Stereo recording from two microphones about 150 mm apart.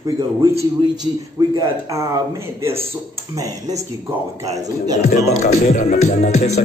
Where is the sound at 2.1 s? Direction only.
20° right (ahead or behind).